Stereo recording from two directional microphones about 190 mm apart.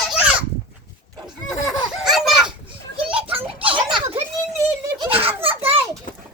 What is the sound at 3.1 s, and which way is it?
Children playing, 30° right (ahead or behind).